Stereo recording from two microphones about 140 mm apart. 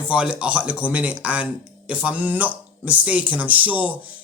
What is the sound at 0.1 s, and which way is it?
Speech, 10° right (ahead or behind).